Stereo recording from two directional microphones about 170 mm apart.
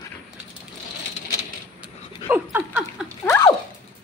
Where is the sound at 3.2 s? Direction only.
15° left (ahead or behind).